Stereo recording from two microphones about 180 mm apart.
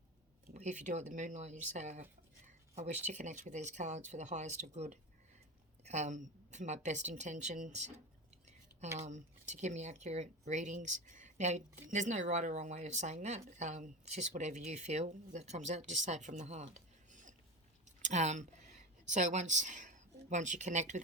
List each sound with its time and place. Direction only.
0.5 s speech: 40° right (ahead or behind)
9.0 s speech: 40° right (ahead or behind)